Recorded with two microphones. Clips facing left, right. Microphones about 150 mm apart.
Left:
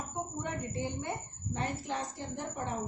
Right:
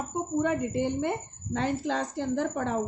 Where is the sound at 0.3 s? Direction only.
90° right.